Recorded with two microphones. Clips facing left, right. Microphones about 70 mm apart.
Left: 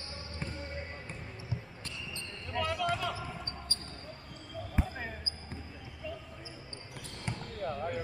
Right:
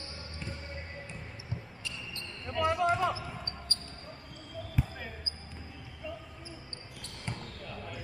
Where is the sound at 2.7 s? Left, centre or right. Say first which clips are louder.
Right 6 dB; right.